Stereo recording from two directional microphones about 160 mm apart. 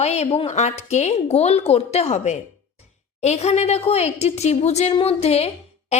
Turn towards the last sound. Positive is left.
turn(degrees=40)  # may be behind; listen again after turning